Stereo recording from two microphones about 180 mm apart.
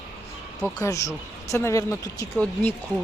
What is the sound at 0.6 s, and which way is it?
Speech, 15° left (ahead or behind).